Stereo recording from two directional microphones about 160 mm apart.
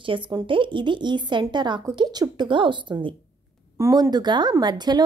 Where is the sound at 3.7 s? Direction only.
20° right (ahead or behind).